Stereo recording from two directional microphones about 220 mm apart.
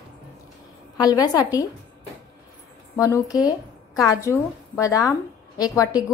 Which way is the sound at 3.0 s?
15° left (ahead or behind).